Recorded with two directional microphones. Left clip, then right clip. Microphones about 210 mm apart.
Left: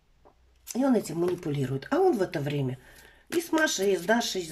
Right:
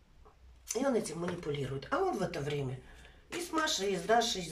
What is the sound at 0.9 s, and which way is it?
Speech, 50° left (ahead or behind).